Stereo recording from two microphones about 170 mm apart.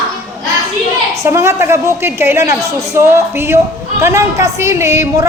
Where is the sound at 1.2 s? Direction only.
15° right (ahead or behind).